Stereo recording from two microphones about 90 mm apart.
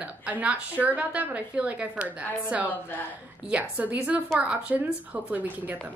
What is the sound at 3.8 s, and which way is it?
Speech, 15° right (ahead or behind).